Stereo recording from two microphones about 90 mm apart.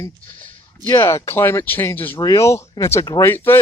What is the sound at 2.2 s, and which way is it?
Speech, 35° left (ahead or behind).